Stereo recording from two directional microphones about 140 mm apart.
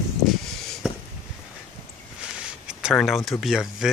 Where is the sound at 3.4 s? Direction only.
Centre (ahead or behind).